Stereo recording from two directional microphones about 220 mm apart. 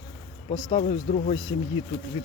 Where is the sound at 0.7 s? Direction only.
35° left (ahead or behind).